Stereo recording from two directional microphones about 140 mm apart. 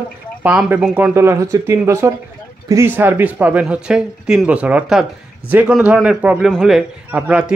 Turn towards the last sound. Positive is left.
turn(degrees=-10)  # may be behind; listen again after turning